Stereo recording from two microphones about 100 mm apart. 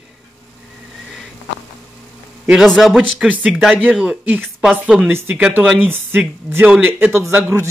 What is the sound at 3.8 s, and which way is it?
Speech, 10° right (ahead or behind).